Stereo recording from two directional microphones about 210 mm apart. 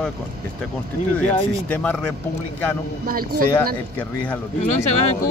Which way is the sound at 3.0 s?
45° right (ahead or behind).